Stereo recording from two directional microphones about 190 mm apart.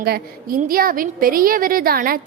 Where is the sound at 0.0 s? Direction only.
50° right (ahead or behind).